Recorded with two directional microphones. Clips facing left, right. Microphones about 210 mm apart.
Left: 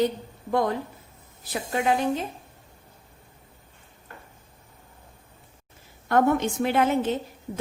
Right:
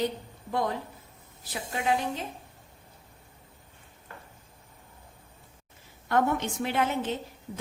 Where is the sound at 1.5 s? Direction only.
60° left (ahead or behind).